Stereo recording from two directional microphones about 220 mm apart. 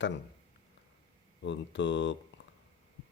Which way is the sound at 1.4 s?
55° left (ahead or behind).